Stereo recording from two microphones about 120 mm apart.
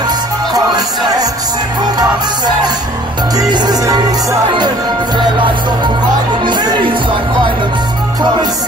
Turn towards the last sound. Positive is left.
turn(degrees=-35)  # may be behind; listen again after turning